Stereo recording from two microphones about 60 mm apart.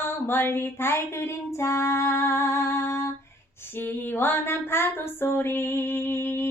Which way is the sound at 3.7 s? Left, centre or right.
Left.